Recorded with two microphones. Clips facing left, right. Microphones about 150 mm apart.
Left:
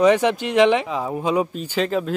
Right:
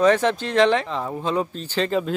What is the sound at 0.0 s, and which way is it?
Speech, 15° left (ahead or behind).